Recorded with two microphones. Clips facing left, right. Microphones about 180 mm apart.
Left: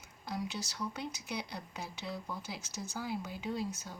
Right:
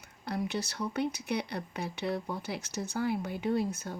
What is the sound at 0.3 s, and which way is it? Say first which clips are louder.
Speech: right 6 dB; 60° right (ahead or behind).